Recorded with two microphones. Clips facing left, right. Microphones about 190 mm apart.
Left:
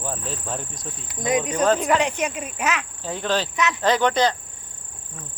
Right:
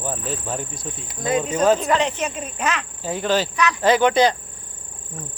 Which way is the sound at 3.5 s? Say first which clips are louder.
Right 2 dB; 20° left (ahead or behind).